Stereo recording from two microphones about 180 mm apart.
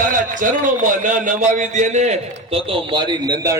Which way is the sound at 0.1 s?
45° right (ahead or behind).